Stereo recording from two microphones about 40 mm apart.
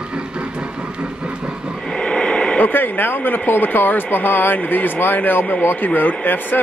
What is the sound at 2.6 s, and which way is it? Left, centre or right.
Speech, left.